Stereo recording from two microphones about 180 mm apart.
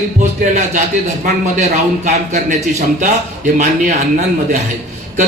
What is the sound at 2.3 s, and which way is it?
A man's voice, 40° right (ahead or behind).